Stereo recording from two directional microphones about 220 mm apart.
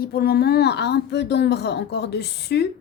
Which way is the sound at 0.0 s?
45° left (ahead or behind).